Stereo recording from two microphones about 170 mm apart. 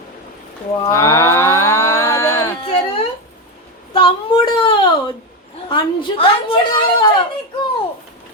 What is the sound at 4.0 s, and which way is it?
Speech, 30° left (ahead or behind).